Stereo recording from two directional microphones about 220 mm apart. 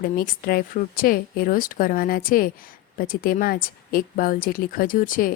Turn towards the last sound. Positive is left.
turn(degrees=40)  # may be behind; listen again after turning